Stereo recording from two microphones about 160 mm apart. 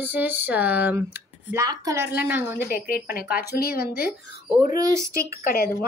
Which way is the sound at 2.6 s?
70° left (ahead or behind).